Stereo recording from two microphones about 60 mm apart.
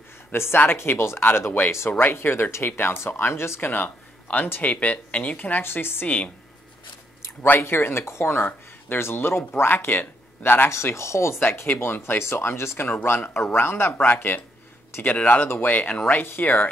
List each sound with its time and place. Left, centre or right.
0.3 s speech: left
5.6 s speech: left
6.0 s speech: left
7.6 s speech: left
10.7 s speech: left
15.4 s speech: left
15.7 s speech: left